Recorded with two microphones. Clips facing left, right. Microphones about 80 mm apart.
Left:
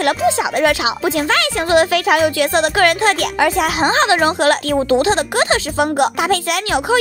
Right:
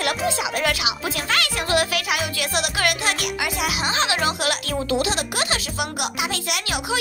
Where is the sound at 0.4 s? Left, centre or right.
Left.